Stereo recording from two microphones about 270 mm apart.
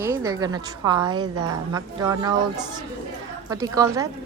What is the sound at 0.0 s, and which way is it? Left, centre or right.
A woman's voice, centre.